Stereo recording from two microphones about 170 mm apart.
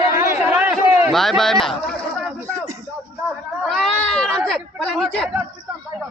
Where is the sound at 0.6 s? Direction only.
10° right (ahead or behind).